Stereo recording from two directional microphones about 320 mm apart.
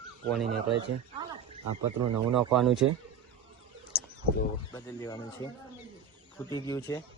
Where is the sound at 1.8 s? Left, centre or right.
Right.